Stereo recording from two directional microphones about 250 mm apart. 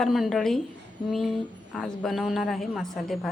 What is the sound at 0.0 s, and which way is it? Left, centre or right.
A woman's voice, centre.